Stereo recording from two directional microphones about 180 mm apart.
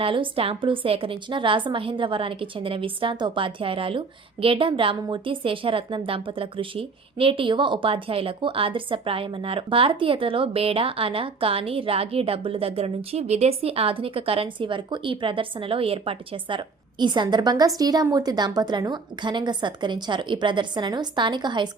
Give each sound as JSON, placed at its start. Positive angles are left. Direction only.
{"t": 0.0, "sound": "a woman's voice", "side_deg": -30}